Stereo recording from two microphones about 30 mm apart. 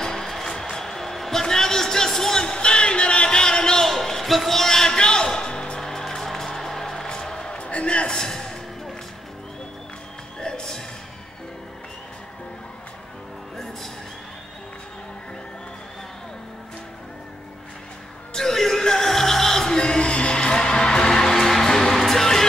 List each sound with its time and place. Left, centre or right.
0.0 s music: centre
0.5 s a sound: centre
2.4 s music: left
3.3 s a sound: left
3.8 s music: centre; by 5.8 s left
5.8 s music: centre
7.1 s music: left
7.5 s a sound: left
8.1 s a sound: centre
10.4 s music: left
18.4 s music: centre
19.8 s music: left; by 22.5 s centre